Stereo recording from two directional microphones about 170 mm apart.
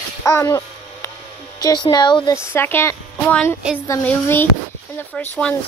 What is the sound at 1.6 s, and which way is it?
Speech, 25° left (ahead or behind).